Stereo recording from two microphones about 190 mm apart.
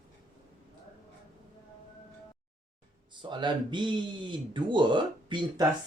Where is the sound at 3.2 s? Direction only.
25° right (ahead or behind).